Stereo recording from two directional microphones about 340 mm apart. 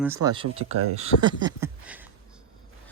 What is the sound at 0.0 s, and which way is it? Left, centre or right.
Speech, centre.